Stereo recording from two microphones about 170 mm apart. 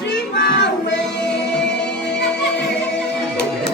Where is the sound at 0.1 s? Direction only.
85° left.